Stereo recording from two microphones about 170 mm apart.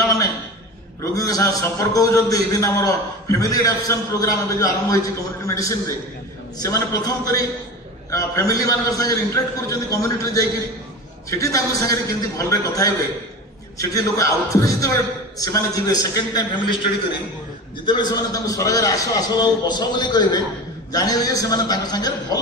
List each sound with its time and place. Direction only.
1.1 s a man's voice: 20° left (ahead or behind)
17.8 s a man's voice: 25° left (ahead or behind)